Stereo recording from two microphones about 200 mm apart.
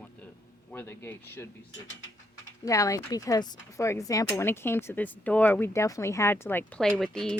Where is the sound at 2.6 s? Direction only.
15° left (ahead or behind).